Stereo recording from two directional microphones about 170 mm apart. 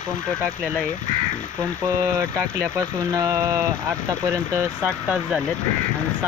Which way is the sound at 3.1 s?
20° right (ahead or behind).